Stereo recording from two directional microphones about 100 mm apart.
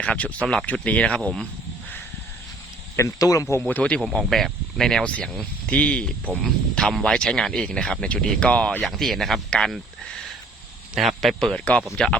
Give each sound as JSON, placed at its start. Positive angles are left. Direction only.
{"t": 0.0, "sound": "speech", "side_deg": 10}
{"t": 2.9, "sound": "speech", "side_deg": 35}
{"t": 3.7, "sound": "speech", "side_deg": 15}
{"t": 4.0, "sound": "speech", "side_deg": 0}
{"t": 8.8, "sound": "speech", "side_deg": 0}